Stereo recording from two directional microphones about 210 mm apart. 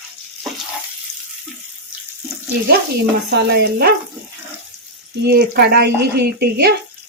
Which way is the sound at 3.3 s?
50° right (ahead or behind).